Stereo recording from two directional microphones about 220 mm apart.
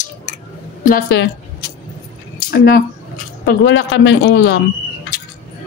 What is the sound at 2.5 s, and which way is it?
A woman's voice, 45° left (ahead or behind).